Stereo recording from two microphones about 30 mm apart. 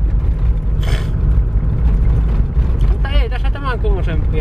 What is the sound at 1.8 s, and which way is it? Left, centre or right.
Vehicle, centre.